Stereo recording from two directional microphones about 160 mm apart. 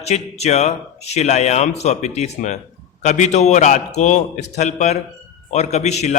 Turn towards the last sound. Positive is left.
turn(degrees=45)  # may be behind; listen again after turning